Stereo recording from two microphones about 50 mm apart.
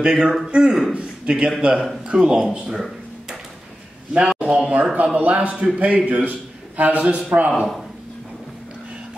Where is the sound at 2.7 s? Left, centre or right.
Centre.